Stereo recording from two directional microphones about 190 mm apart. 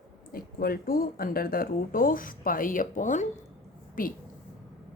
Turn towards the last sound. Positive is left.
turn(degrees=45)  # may be behind; listen again after turning